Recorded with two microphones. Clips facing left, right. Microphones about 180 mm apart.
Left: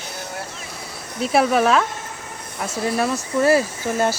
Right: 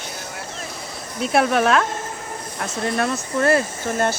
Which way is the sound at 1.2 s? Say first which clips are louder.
Left 1 dB; centre (ahead or behind).